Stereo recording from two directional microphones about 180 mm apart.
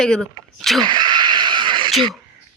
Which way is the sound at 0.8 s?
25° right (ahead or behind).